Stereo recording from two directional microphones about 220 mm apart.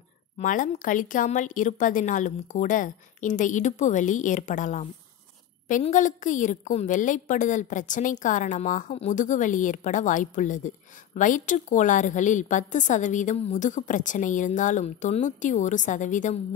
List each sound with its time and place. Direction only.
0.4 s a woman's voice: 35° left (ahead or behind)